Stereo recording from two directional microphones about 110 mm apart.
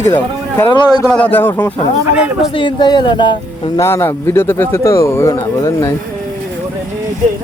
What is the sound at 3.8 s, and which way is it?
Speech, 25° left (ahead or behind).